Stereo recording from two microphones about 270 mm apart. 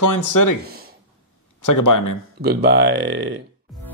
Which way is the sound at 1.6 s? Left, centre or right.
Left.